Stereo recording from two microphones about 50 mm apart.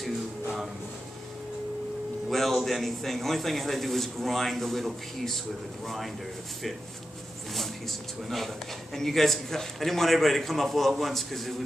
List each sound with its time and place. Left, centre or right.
2.3 s a man's voice: centre
8.2 s a man's voice: centre